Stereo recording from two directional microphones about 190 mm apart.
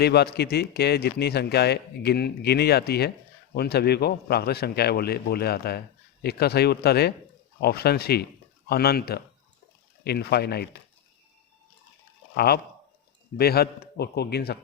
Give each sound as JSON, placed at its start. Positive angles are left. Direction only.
{"t": 0.0, "sound": "speech", "side_deg": 60}
{"t": 12.3, "sound": "speech", "side_deg": 55}